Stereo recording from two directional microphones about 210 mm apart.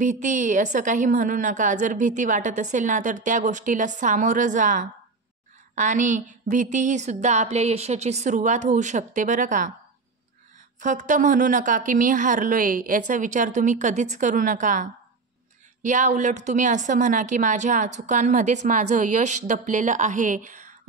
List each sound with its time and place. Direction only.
0.0 s a woman's voice: 35° right (ahead or behind)
10.8 s a woman's voice: 40° right (ahead or behind)